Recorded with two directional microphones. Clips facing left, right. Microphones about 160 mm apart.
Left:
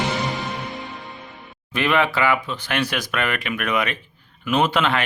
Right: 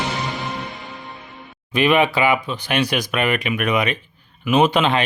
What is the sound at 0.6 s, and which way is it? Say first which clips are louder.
Music: left 1 dB; centre (ahead or behind).